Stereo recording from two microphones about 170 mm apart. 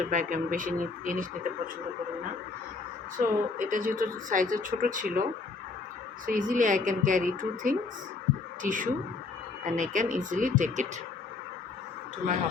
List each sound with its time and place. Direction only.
0.0 s speech: 50° right (ahead or behind)
3.2 s speech: 50° right (ahead or behind)
6.2 s speech: 50° right (ahead or behind)